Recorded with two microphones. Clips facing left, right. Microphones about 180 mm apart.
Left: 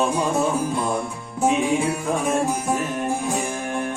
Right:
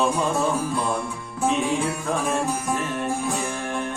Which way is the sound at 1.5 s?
20° left (ahead or behind).